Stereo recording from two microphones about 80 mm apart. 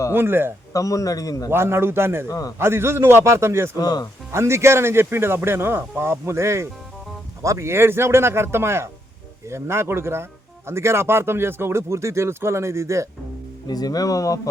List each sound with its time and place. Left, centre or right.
0.1 s a man's voice: right
0.7 s speech: left
1.5 s speech: right
2.2 s speech: left
2.6 s speech: right
3.8 s speech: left
4.3 s speech: right
13.7 s speech: left